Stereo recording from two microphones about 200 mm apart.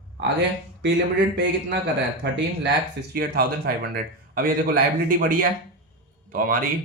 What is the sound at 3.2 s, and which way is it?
Speech, 50° right (ahead or behind).